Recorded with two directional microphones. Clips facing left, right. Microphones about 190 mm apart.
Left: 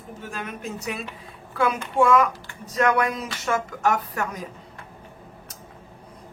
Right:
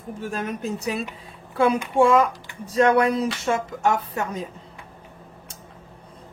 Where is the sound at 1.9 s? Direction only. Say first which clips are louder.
Even; 30° right (ahead or behind).